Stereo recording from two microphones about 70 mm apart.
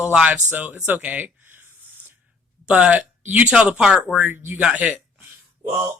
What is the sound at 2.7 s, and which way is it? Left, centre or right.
Speech, centre.